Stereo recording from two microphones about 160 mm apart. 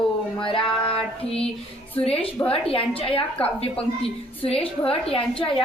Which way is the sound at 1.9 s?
35° left (ahead or behind).